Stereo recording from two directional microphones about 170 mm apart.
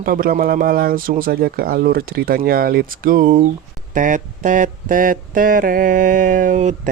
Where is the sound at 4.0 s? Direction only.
50° right (ahead or behind).